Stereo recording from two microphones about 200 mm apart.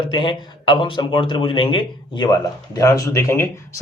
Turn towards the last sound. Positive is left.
turn(degrees=15)  # may be behind; listen again after turning